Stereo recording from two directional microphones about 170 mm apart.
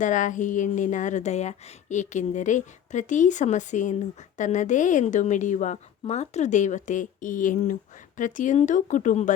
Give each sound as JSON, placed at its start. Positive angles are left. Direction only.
{"t": 0.0, "sound": "a woman's voice", "side_deg": 45}